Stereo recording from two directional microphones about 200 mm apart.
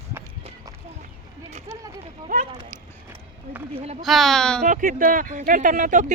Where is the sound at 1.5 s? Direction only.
35° right (ahead or behind).